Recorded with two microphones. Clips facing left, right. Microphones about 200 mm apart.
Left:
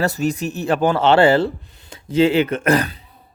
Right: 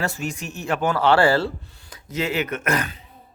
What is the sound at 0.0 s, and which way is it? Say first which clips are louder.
Speech: left 8 dB; 35° left (ahead or behind).